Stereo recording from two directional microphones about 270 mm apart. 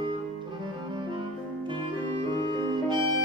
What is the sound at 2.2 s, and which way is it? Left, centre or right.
Music, centre.